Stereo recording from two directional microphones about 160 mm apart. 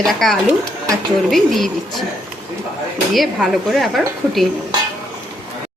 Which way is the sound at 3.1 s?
Centre (ahead or behind).